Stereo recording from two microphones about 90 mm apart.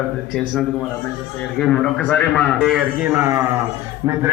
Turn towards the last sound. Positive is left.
turn(degrees=-35)  # may be behind; listen again after turning